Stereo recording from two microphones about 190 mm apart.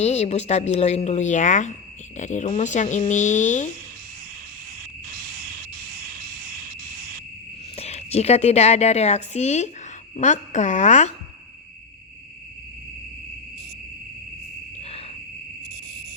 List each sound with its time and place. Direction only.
0.0 s speech: 35° left (ahead or behind)
4.8 s a sound: 55° right (ahead or behind)
7.8 s a woman's voice: 35° left (ahead or behind)
14.8 s owl: 30° left (ahead or behind)